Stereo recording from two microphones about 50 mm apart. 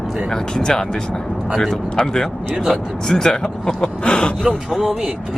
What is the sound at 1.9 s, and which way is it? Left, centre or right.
Speech, centre.